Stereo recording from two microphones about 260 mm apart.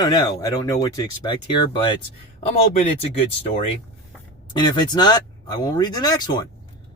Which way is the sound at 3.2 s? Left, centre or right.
Left.